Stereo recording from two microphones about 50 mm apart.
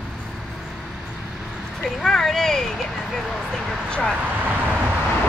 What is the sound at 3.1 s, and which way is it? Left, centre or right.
Vehicle, centre.